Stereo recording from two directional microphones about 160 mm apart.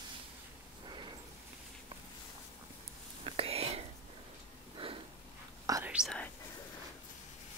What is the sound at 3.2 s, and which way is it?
Whispering, 40° right (ahead or behind).